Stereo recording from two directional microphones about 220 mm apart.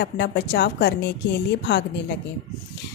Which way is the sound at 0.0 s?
50° left (ahead or behind).